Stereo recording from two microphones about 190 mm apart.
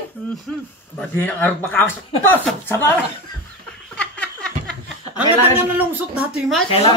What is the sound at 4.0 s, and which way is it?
Laughter, 5° left (ahead or behind).